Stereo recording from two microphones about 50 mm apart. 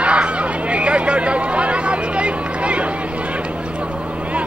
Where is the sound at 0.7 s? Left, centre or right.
Right.